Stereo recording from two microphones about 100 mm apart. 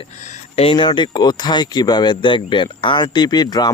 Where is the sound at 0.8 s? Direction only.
50° left (ahead or behind).